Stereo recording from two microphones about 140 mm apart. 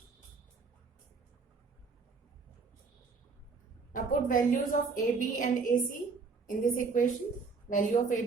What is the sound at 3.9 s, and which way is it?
A woman's voice, 75° left (ahead or behind).